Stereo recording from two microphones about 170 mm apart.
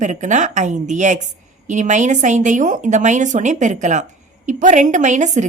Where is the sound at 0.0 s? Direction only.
45° right (ahead or behind).